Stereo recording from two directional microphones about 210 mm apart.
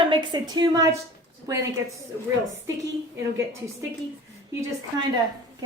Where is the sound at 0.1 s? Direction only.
20° right (ahead or behind).